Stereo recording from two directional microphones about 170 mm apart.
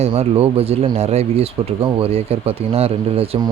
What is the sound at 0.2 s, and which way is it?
Speech, 35° right (ahead or behind).